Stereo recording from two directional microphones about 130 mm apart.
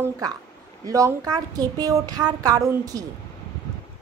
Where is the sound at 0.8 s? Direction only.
25° right (ahead or behind).